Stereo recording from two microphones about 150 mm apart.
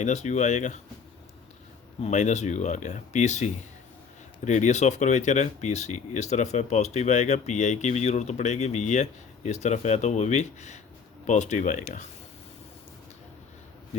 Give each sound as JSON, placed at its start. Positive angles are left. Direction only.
{"t": 0.0, "sound": "speech", "side_deg": 50}
{"t": 2.0, "sound": "speech", "side_deg": 50}